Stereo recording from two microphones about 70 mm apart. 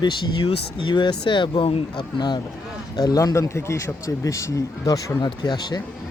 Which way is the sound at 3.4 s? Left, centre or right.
Left.